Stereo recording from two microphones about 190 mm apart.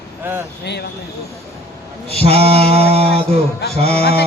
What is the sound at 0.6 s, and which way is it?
Speech, 60° left (ahead or behind).